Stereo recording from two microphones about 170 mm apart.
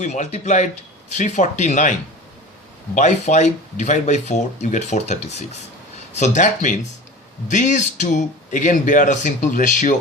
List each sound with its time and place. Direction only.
0.0 s speech: 40° left (ahead or behind)
2.9 s speech: 45° left (ahead or behind)